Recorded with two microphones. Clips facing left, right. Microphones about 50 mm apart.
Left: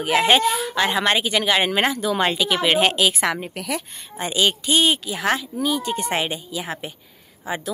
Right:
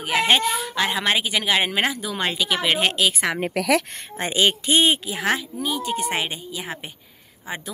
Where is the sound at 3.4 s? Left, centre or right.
Right.